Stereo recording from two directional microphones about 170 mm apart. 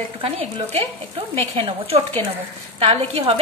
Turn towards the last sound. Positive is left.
turn(degrees=-35)  # may be behind; listen again after turning